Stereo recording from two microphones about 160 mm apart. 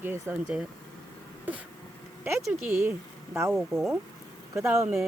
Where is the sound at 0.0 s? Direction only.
15° right (ahead or behind).